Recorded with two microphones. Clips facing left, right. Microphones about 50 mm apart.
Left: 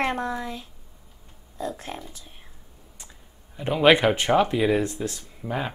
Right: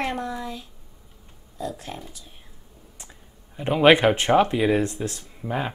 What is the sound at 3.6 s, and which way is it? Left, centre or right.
A man's voice, centre.